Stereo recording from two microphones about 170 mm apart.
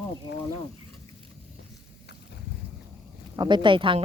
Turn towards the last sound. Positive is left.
turn(degrees=-30)  # may be behind; listen again after turning